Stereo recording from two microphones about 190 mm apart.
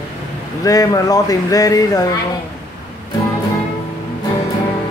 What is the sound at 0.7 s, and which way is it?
Speech, 20° left (ahead or behind).